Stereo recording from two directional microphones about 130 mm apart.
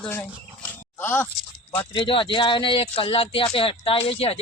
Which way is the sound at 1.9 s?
40° left (ahead or behind).